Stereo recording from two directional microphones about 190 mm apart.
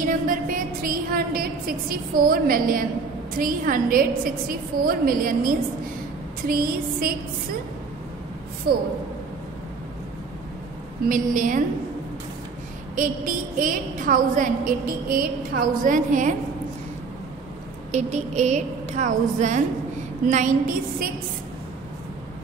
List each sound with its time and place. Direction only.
0.0 s a sound: 45° right (ahead or behind)
3.3 s a woman's voice: 50° right (ahead or behind)
8.7 s a woman's voice: 55° right (ahead or behind)
11.1 s a woman's voice: 45° right (ahead or behind)
12.9 s a woman's voice: 45° right (ahead or behind)
17.9 s a woman's voice: 40° right (ahead or behind)